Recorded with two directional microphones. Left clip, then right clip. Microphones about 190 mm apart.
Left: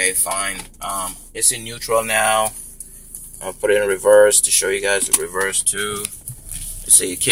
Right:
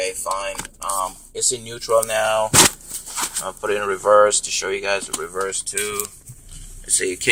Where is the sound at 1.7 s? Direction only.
15° right (ahead or behind).